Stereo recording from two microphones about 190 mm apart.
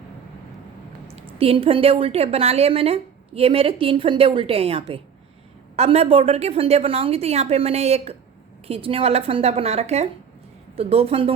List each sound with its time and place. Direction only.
1.4 s a woman's voice: 30° right (ahead or behind)